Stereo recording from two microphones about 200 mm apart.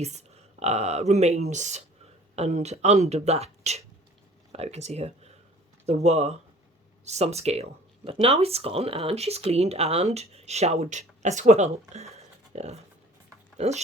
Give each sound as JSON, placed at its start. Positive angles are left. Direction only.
{"t": 0.0, "sound": "speech", "side_deg": -35}